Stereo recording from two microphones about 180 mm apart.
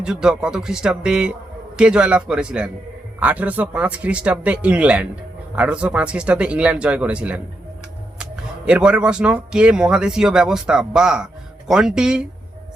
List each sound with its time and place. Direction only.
0.0 s a man's voice: 5° right (ahead or behind)